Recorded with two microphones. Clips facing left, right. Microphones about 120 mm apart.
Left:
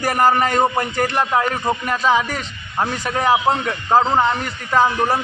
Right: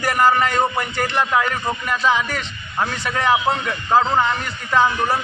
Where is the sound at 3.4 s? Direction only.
20° left (ahead or behind).